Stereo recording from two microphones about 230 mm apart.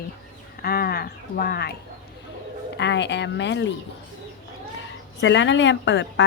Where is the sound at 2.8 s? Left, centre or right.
Left.